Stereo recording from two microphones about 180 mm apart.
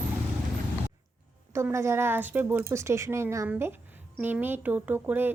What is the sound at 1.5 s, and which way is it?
A woman's voice, 15° right (ahead or behind).